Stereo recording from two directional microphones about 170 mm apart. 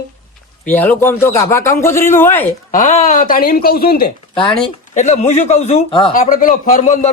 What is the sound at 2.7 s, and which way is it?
Speech, 45° left (ahead or behind).